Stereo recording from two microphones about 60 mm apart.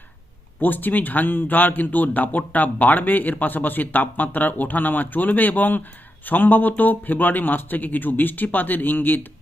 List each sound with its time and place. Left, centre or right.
0.6 s speech: left